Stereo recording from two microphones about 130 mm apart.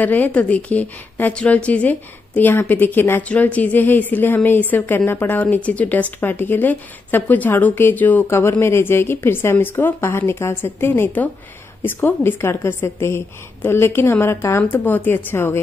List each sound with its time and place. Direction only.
0.0 s a woman's voice: 10° left (ahead or behind)